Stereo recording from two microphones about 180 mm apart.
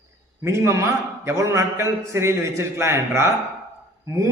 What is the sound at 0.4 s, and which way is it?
A man's voice, 15° right (ahead or behind).